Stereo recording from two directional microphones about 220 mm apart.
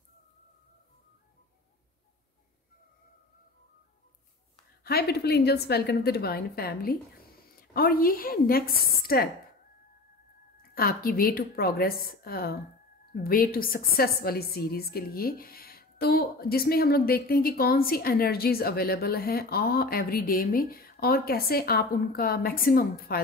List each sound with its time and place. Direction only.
4.8 s a woman's voice: 45° left (ahead or behind)
10.7 s a woman's voice: 40° left (ahead or behind)